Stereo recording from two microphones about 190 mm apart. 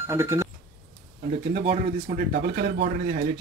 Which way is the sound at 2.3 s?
55° right (ahead or behind).